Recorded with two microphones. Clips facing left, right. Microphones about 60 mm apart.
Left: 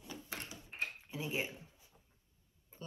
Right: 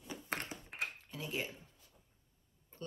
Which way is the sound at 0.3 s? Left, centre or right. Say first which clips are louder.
Right 7 dB; right.